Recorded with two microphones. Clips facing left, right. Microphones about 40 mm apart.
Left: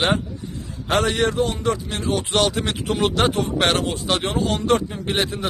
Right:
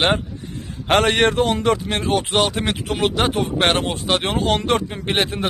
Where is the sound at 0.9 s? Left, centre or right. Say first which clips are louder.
Right 4 dB; right.